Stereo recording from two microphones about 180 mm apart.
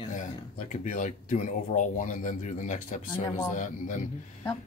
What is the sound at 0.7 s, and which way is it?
Speech, 45° left (ahead or behind).